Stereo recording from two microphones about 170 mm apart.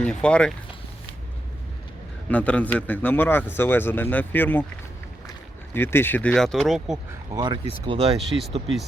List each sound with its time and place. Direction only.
0.0 s speech: 5° left (ahead or behind)
2.3 s speech: 10° left (ahead or behind)
5.7 s speech: 15° left (ahead or behind); by 7.0 s 5° right (ahead or behind)
7.3 s speech: 30° right (ahead or behind)
8.3 s speech: centre (ahead or behind)